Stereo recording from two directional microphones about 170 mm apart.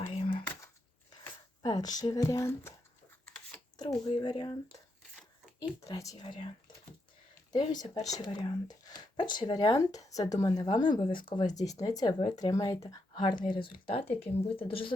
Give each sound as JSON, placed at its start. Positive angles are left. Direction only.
{"t": 0.1, "sound": "a sound", "side_deg": 35}
{"t": 1.6, "sound": "speech", "side_deg": 20}
{"t": 3.8, "sound": "speech", "side_deg": 25}
{"t": 5.5, "sound": "speech", "side_deg": 20}
{"t": 7.5, "sound": "speech", "side_deg": 25}
{"t": 8.6, "sound": "a sound", "side_deg": 25}
{"t": 9.3, "sound": "speech", "side_deg": 25}